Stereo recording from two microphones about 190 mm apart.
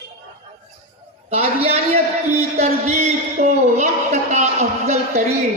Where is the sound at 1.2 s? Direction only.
35° right (ahead or behind).